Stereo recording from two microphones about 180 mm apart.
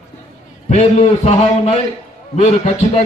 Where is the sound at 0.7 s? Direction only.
35° left (ahead or behind).